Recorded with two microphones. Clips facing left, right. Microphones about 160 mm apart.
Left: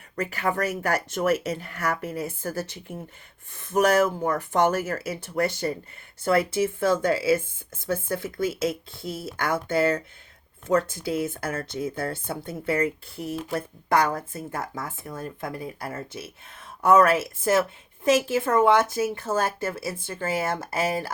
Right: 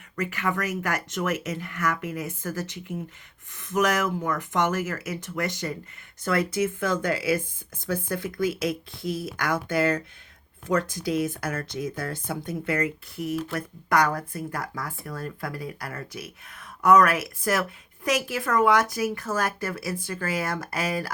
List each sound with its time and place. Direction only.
0.2 s speech: 35° left (ahead or behind)
6.7 s speech: 30° left (ahead or behind)